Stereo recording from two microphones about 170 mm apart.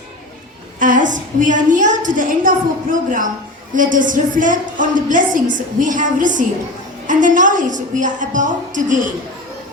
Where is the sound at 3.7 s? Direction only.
50° right (ahead or behind).